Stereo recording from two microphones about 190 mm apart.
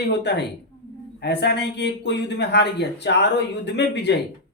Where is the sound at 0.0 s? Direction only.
65° left (ahead or behind).